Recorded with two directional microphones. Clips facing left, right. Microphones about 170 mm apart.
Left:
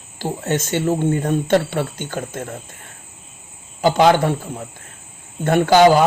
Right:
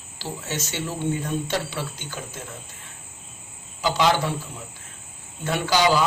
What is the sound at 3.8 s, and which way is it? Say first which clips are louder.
Speech: left 7 dB; 50° left (ahead or behind).